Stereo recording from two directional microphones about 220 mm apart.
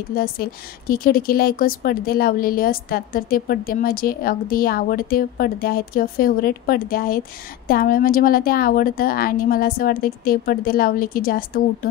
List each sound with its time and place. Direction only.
0.1 s a woman's voice: 40° left (ahead or behind)